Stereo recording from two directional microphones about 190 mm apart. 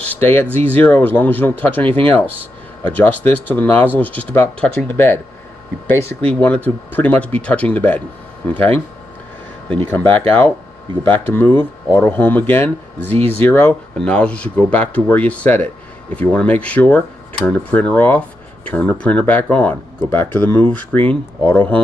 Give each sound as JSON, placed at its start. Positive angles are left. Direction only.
{"t": 0.0, "sound": "speech", "side_deg": 10}
{"t": 9.8, "sound": "speech", "side_deg": 10}
{"t": 20.6, "sound": "speech", "side_deg": -30}
{"t": 21.1, "sound": "speech", "side_deg": 10}